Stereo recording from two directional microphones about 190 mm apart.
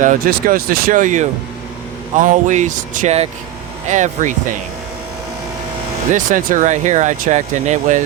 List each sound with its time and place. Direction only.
0.0 s speech: 45° right (ahead or behind)
6.1 s speech: 45° right (ahead or behind)